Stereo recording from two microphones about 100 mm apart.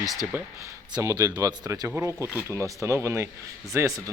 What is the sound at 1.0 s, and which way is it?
Speech, 35° right (ahead or behind).